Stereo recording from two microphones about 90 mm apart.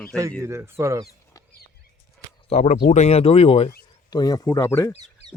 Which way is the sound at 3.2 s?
90° left.